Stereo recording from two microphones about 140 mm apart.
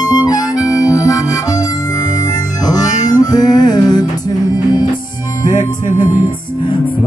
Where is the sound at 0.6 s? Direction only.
25° left (ahead or behind).